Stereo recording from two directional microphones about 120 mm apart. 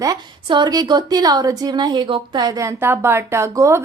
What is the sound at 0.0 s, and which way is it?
A woman's voice, 35° right (ahead or behind).